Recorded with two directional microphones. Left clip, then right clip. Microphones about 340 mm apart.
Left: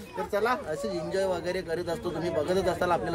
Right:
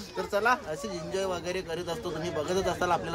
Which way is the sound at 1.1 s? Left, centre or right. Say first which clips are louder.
Left 2 dB; centre.